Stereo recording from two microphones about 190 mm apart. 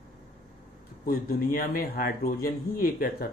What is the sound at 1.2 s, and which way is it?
Speech, 50° left (ahead or behind).